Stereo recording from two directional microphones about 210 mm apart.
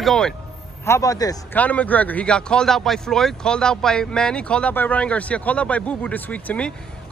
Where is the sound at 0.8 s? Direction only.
15° left (ahead or behind).